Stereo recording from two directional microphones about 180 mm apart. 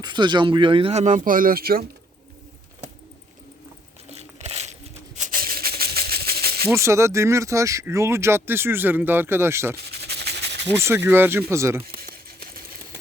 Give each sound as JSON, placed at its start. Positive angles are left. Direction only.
{"t": 0.0, "sound": "speech", "side_deg": -25}
{"t": 4.4, "sound": "a sound", "side_deg": -35}
{"t": 6.7, "sound": "speech", "side_deg": -15}
{"t": 9.7, "sound": "rub", "side_deg": -65}
{"t": 10.8, "sound": "speech", "side_deg": -15}
{"t": 11.9, "sound": "a sound", "side_deg": -55}